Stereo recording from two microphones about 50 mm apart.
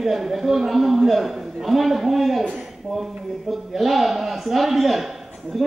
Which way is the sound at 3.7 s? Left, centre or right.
Centre.